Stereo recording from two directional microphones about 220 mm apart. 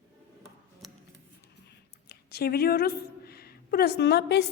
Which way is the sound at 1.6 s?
45° left (ahead or behind).